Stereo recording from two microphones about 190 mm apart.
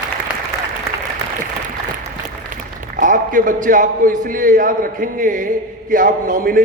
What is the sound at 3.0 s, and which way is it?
A man's voice, 45° right (ahead or behind).